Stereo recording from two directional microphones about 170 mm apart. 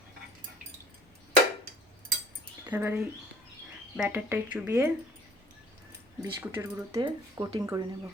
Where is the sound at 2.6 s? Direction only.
10° right (ahead or behind).